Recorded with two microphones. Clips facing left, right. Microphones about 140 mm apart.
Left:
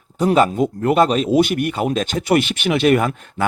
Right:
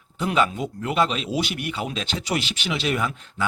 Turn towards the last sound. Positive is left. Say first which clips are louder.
# left 9 dB
turn(degrees=55)  # may be behind; listen again after turning